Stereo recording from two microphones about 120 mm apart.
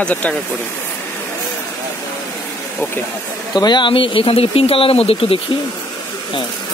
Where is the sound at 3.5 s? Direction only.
35° left (ahead or behind); by 5.4 s 55° left (ahead or behind).